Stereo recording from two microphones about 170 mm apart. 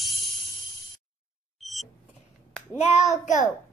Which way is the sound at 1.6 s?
Centre (ahead or behind).